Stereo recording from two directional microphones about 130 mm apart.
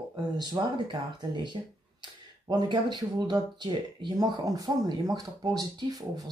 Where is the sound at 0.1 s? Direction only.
35° right (ahead or behind).